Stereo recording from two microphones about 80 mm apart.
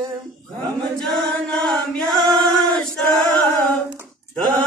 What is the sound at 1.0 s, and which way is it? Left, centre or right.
Chant, centre.